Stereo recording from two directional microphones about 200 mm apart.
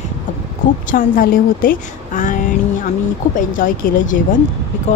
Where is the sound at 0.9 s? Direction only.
45° left (ahead or behind).